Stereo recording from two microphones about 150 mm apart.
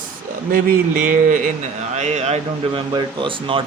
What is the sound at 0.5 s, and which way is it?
Speech, 65° right (ahead or behind).